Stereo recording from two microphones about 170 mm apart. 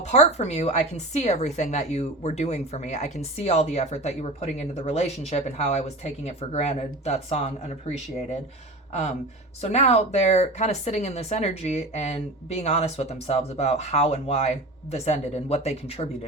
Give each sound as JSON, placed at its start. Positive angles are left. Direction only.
{"t": 0.0, "sound": "a woman's voice", "side_deg": 40}